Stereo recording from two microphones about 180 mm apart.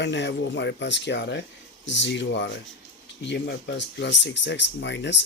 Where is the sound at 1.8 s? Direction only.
85° left.